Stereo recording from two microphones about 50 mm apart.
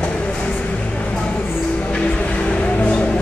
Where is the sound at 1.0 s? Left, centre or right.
Left.